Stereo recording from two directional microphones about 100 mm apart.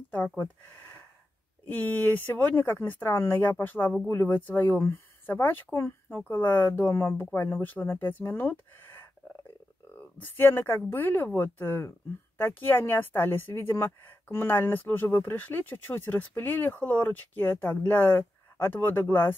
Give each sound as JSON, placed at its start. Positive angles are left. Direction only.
{"t": 1.7, "sound": "a woman's voice", "side_deg": 20}